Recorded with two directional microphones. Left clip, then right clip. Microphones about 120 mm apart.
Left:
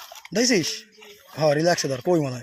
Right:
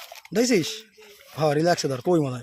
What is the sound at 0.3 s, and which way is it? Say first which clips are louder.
Speech: left 1 dB; 90° right.